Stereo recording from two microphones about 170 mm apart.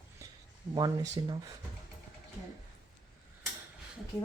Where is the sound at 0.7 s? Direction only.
25° right (ahead or behind).